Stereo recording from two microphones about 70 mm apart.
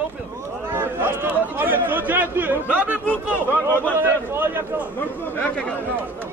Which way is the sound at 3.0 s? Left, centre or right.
Left.